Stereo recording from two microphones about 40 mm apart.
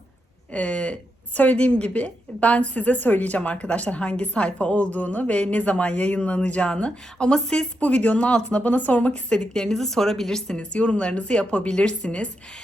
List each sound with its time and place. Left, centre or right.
0.5 s a woman's voice: left
7.8 s a woman's voice: left
9.3 s a woman's voice: centre
10.7 s speech: left